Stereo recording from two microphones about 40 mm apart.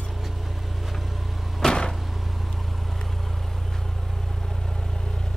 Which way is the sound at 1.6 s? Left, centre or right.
Left.